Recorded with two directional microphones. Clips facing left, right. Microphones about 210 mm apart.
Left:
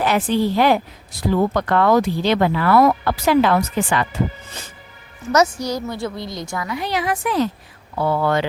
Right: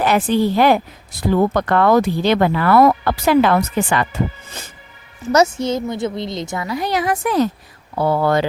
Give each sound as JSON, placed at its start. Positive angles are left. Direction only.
{"t": 0.0, "sound": "speech", "side_deg": -50}
{"t": 5.3, "sound": "a woman's voice", "side_deg": -25}
{"t": 6.7, "sound": "speech", "side_deg": -40}